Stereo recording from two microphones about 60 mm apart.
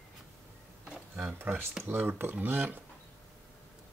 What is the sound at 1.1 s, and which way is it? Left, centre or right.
Speech, right.